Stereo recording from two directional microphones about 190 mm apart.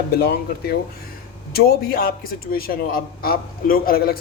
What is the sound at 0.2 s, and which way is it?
Speech, 55° left (ahead or behind).